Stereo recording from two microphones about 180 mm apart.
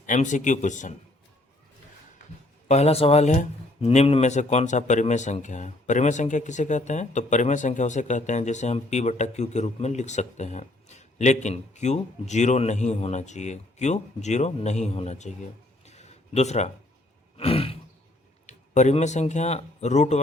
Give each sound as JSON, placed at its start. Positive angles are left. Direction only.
{"t": 0.0, "sound": "speech", "side_deg": 45}
{"t": 2.6, "sound": "speech", "side_deg": 35}
{"t": 15.9, "sound": "a sound", "side_deg": 40}
{"t": 17.3, "sound": "roar", "side_deg": 30}
{"t": 18.4, "sound": "speech", "side_deg": 40}